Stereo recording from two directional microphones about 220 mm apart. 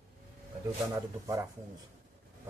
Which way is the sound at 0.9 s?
15° right (ahead or behind).